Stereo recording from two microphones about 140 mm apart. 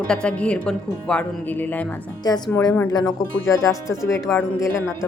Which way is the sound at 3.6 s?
20° left (ahead or behind).